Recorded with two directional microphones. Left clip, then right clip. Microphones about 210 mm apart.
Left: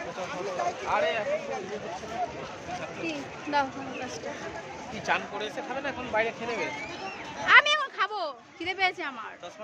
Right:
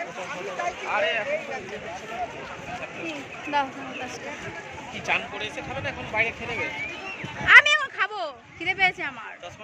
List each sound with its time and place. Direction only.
0.9 s speech: 25° left (ahead or behind)
3.5 s speech: centre (ahead or behind)
5.0 s speech: 35° left (ahead or behind)
7.4 s a sound: centre (ahead or behind)